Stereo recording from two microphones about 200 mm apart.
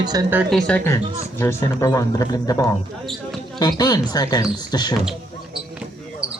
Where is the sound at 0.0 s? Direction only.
20° right (ahead or behind).